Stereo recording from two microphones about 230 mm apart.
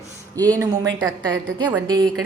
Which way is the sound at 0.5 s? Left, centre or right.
Centre.